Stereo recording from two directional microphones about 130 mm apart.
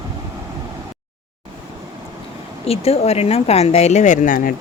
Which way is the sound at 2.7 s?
50° left (ahead or behind).